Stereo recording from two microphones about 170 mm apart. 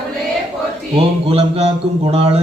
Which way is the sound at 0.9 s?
35° right (ahead or behind).